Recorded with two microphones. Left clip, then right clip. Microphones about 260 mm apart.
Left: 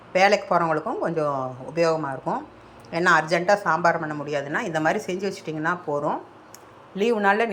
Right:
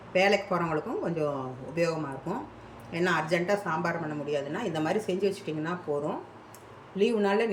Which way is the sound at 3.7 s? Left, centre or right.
Centre.